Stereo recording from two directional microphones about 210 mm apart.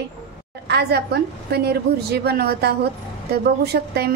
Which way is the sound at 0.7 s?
50° right (ahead or behind).